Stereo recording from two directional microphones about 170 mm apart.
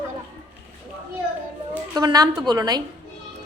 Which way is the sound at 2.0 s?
20° right (ahead or behind).